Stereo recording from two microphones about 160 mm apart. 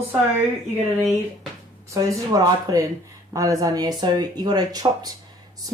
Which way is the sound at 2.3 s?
25° right (ahead or behind).